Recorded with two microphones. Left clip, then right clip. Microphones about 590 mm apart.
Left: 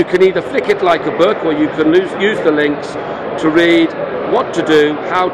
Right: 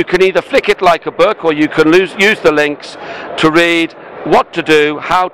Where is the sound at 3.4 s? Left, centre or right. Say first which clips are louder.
Right 1 dB; right.